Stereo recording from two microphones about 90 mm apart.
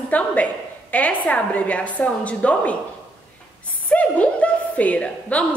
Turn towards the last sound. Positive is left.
turn(degrees=15)  # may be behind; listen again after turning